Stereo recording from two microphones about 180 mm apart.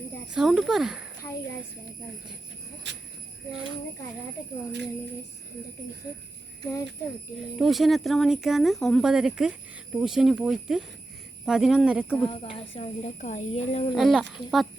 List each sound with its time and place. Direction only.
0.3 s speech: 5° right (ahead or behind)
2.8 s speech: 75° right (ahead or behind)
7.3 s speech: centre (ahead or behind)
12.3 s speech: 30° left (ahead or behind)
13.9 s speech: centre (ahead or behind)